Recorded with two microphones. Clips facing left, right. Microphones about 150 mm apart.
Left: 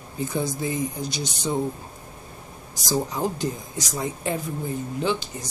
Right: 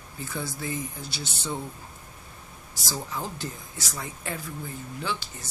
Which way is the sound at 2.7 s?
15° left (ahead or behind).